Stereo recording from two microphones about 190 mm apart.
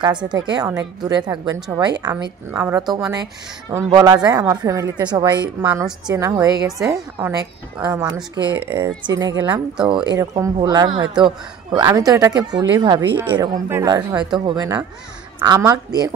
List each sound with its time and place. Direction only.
0.7 s a woman's voice: 20° right (ahead or behind)
8.2 s speech: 10° right (ahead or behind)
8.8 s a woman's voice: 20° right (ahead or behind)
13.2 s a woman's voice: 10° right (ahead or behind)